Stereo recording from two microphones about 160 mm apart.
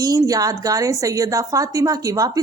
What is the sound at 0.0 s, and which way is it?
A woman's voice, 20° right (ahead or behind).